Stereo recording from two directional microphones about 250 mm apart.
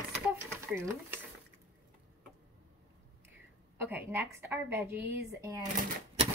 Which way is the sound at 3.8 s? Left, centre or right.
Centre.